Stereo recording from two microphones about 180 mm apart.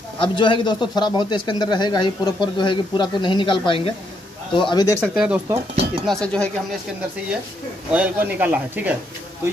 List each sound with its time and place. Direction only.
0.2 s speech: 25° left (ahead or behind)
5.0 s speech: 5° right (ahead or behind)
6.0 s speech: 5° left (ahead or behind)
7.9 s speech: 10° right (ahead or behind)